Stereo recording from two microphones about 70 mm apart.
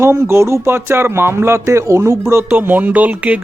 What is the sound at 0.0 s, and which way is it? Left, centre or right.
Speech, right.